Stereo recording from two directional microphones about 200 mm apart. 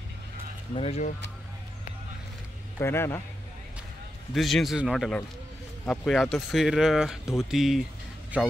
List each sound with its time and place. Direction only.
0.7 s speech: 30° left (ahead or behind)
2.8 s a man's voice: 15° left (ahead or behind)
4.3 s a man's voice: centre (ahead or behind)